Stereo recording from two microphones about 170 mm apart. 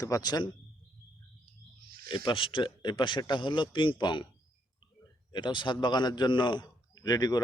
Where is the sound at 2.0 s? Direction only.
30° left (ahead or behind).